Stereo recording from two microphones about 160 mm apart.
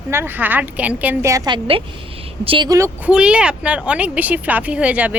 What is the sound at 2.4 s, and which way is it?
Speech, 35° right (ahead or behind).